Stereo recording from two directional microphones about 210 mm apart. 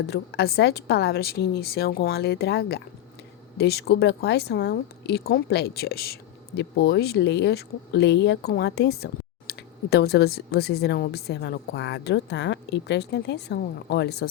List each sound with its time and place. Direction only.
0.0 s a woman's voice: 50° left (ahead or behind)